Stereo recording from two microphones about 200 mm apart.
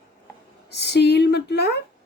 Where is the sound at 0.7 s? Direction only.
55° left (ahead or behind).